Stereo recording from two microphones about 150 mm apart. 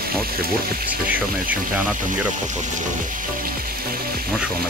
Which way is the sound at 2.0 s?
55° right (ahead or behind).